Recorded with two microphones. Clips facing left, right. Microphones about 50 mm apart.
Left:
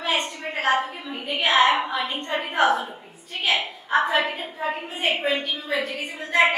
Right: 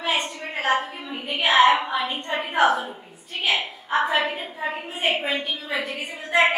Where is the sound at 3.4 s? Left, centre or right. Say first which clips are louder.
Even; centre.